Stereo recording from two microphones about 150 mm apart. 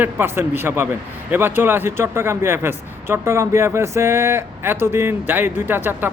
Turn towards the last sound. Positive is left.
turn(degrees=-15)  # may be behind; listen again after turning